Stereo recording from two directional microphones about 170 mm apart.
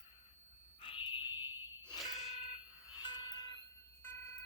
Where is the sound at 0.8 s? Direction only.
30° left (ahead or behind).